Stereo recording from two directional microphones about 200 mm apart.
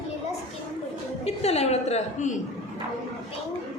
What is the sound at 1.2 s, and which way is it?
A woman's voice, 30° left (ahead or behind).